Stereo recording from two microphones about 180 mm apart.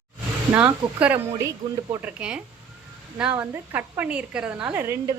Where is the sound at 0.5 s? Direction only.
5° right (ahead or behind).